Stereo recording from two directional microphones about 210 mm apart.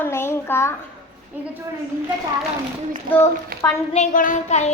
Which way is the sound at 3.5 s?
45° right (ahead or behind).